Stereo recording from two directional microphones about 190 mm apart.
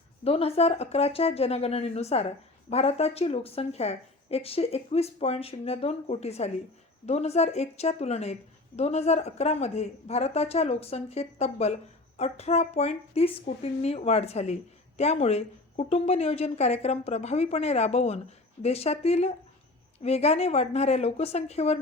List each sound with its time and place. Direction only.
0.3 s a woman's voice: 30° left (ahead or behind)